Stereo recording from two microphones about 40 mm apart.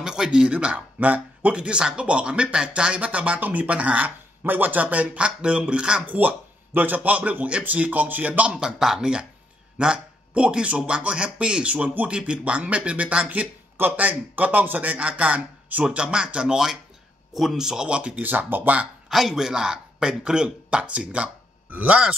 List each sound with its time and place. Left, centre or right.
0.0 s speech: centre
1.0 s speech: right
1.5 s speech: right
4.4 s speech: right
6.0 s speech: right
8.5 s a man's voice: right
15.8 s speech: right
17.3 s speech: centre
17.8 s speech: right
18.1 s speech: right
19.0 s speech: centre; by 21.3 s right
21.6 s speech: right